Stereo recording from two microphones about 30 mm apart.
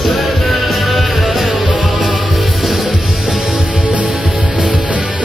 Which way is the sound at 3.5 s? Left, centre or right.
Right.